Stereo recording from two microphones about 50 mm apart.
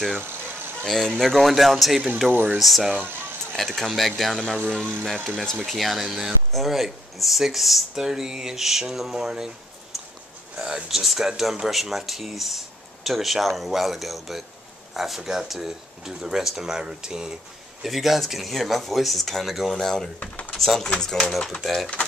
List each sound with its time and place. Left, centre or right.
0.8 s speech: centre
5.6 s speech: centre
9.9 s a sound: centre
10.6 s speech: centre
20.2 s speech: left
20.5 s speech: centre